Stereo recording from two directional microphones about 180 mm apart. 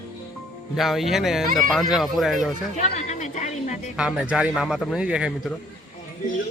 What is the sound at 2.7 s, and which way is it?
A woman's voice, 40° left (ahead or behind).